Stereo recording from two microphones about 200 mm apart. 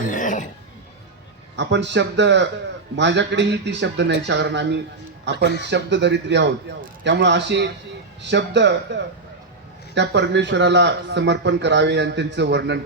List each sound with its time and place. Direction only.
0.1 s cough: 40° left (ahead or behind)
1.5 s speech: 60° right (ahead or behind)